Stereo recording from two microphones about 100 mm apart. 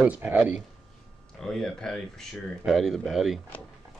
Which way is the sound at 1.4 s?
5° left (ahead or behind).